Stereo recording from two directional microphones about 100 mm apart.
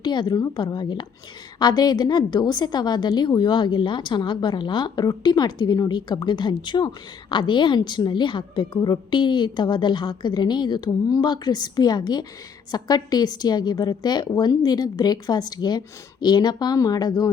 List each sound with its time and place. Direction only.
0.0 s a woman's voice: 50° left (ahead or behind)